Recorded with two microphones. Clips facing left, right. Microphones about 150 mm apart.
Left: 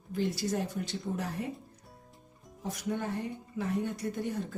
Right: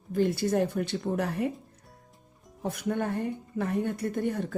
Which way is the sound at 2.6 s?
60° right (ahead or behind).